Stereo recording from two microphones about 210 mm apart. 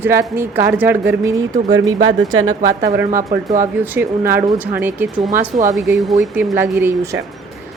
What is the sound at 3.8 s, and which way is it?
A woman's voice, 10° right (ahead or behind).